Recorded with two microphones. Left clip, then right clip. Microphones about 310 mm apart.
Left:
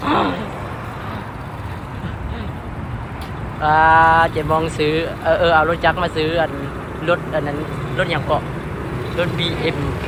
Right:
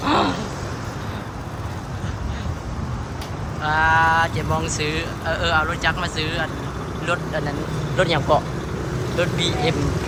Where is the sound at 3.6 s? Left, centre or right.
Centre.